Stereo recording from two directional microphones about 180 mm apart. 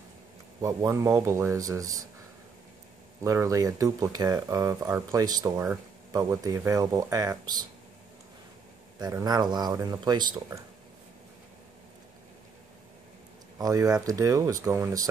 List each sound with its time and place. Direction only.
0.6 s speech: 15° right (ahead or behind)
3.3 s speech: 20° right (ahead or behind)
9.0 s speech: 20° right (ahead or behind)
13.6 s speech: 20° right (ahead or behind)